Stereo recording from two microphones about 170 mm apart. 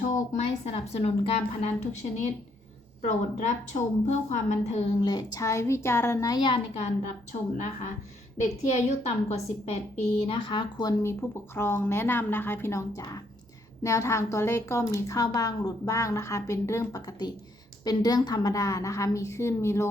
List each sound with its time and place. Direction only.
0.1 s a woman's voice: 40° left (ahead or behind)
5.0 s a woman's voice: 20° left (ahead or behind)
8.4 s a woman's voice: 45° left (ahead or behind); by 10.9 s 25° left (ahead or behind)
11.0 s a woman's voice: 15° left (ahead or behind)